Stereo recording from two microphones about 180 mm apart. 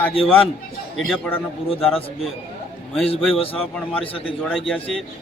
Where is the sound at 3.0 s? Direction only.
30° left (ahead or behind).